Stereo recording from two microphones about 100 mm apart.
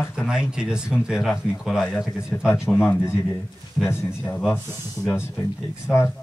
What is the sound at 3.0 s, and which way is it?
Speech, 25° left (ahead or behind).